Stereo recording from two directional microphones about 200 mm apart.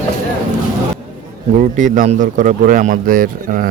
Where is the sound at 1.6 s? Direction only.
40° right (ahead or behind).